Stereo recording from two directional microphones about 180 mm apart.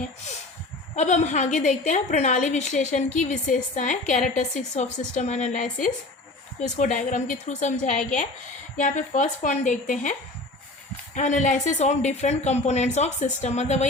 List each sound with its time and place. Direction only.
0.9 s a woman's voice: 40° left (ahead or behind)